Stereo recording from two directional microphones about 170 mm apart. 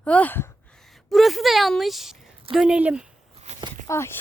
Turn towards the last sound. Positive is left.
turn(degrees=15)  # may be behind; listen again after turning